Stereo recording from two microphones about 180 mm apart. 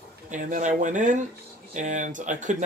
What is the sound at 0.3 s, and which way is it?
Speech, 45° right (ahead or behind).